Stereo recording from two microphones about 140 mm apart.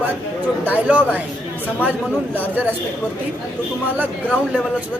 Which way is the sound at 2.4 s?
10° right (ahead or behind).